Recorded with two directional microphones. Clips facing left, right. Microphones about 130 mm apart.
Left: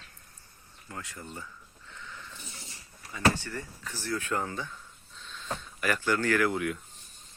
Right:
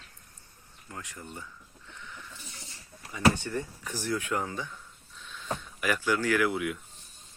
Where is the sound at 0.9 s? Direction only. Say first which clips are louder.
Left 1 dB; 15° right (ahead or behind).